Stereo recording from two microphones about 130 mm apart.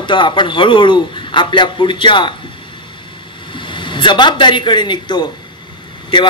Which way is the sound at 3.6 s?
40° left (ahead or behind).